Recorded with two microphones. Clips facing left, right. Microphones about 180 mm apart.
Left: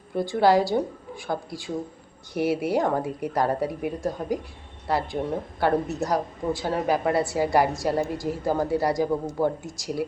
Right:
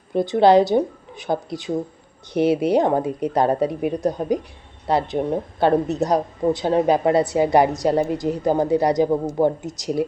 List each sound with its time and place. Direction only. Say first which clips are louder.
0.1 s a woman's voice: right 6 dB; 20° right (ahead or behind)